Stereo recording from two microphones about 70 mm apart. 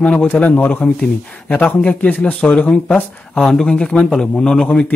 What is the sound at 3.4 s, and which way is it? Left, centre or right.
A man's voice, centre.